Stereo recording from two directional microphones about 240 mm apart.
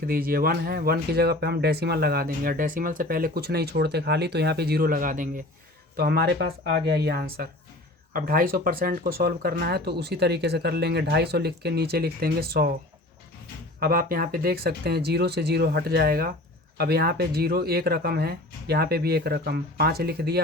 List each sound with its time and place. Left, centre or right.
0.1 s speech: right
13.7 s speech: right